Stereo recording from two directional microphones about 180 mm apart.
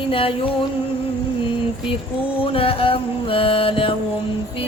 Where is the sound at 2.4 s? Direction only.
30° left (ahead or behind).